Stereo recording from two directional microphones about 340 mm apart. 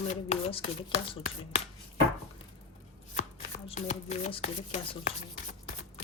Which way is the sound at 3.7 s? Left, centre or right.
Centre.